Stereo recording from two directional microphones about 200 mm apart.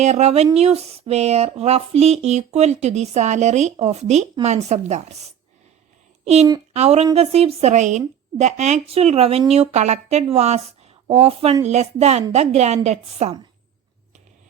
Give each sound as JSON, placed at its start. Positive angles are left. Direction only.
{"t": 0.0, "sound": "a woman's voice", "side_deg": -35}